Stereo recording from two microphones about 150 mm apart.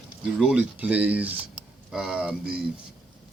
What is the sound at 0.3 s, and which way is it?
Speech, 10° right (ahead or behind).